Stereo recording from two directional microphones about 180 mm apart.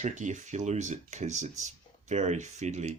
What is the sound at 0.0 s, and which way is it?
Speech, 45° right (ahead or behind).